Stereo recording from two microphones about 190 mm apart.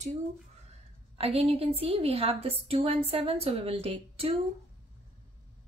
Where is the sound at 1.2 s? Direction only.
30° right (ahead or behind).